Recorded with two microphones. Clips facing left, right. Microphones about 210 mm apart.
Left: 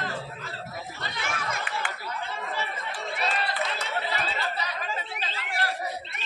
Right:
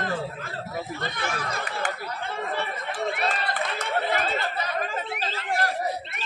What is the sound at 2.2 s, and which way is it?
Chatter, 55° right (ahead or behind).